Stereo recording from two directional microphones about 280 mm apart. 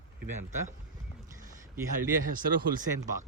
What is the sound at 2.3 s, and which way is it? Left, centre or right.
Speech, right.